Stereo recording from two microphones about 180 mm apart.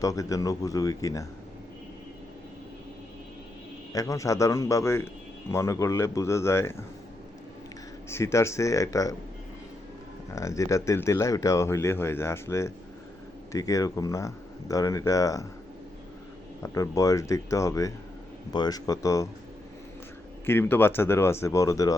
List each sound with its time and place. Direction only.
0.0 s speech: 20° left (ahead or behind)
3.9 s speech: 20° left (ahead or behind)
8.1 s speech: 15° left (ahead or behind)
10.3 s speech: 15° left (ahead or behind)
16.6 s speech: 20° left (ahead or behind)
20.4 s speech: 10° left (ahead or behind)